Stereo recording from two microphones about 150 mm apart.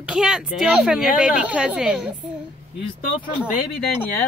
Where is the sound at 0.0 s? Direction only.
5° right (ahead or behind).